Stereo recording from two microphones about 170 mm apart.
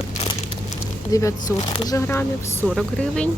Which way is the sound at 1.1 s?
20° left (ahead or behind).